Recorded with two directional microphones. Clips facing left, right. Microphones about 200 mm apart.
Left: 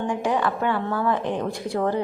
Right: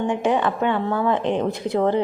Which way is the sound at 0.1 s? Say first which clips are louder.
Right 1 dB; 20° right (ahead or behind).